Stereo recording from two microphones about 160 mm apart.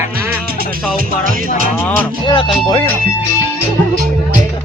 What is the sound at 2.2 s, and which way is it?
Speech, 30° left (ahead or behind).